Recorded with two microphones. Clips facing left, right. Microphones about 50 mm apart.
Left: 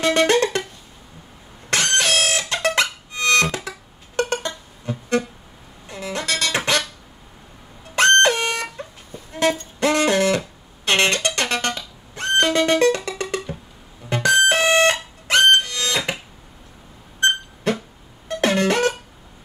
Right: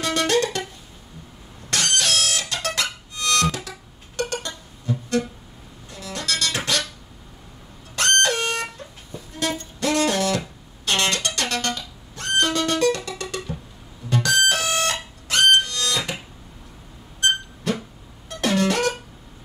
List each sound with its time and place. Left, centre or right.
0.0 s music: left
1.7 s music: left
7.9 s car alarm: left
8.7 s music: left
18.3 s music: left